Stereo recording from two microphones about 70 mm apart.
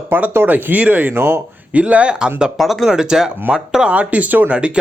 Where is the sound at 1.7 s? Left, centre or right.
Centre.